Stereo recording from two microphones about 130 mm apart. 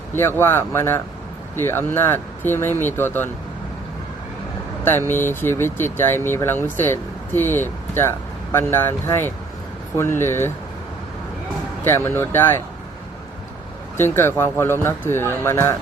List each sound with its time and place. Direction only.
0.1 s speech: 20° left (ahead or behind)
4.9 s speech: 15° left (ahead or behind)
11.9 s speech: 20° left (ahead or behind)
13.9 s speech: 20° left (ahead or behind)